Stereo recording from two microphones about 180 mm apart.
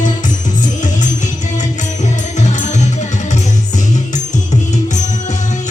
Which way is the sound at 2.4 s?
40° left (ahead or behind).